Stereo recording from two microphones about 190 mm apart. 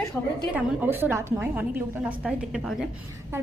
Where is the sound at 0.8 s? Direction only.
10° right (ahead or behind).